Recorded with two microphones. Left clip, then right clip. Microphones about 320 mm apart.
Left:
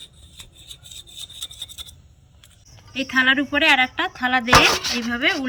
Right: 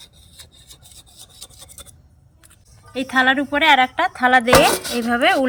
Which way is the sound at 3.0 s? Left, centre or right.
Centre.